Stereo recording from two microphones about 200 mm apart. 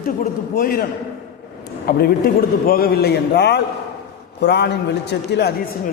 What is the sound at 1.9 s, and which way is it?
A man's voice, 50° left (ahead or behind).